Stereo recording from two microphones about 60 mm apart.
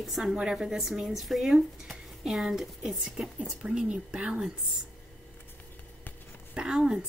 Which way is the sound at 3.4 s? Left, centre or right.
Centre.